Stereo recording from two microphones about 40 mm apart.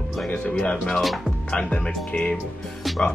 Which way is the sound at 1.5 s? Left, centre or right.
Left.